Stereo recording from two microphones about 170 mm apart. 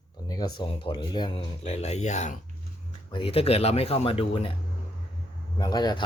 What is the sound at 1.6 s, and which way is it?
Speech, 40° left (ahead or behind).